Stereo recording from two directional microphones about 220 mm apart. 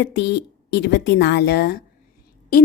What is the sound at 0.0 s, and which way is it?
Speech, 50° left (ahead or behind).